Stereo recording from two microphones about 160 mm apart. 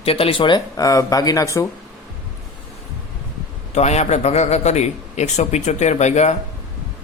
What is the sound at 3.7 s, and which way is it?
A man's voice, 45° left (ahead or behind).